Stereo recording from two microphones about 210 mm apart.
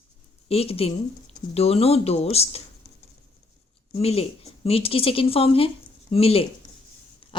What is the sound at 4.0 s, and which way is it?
Speech, 30° left (ahead or behind).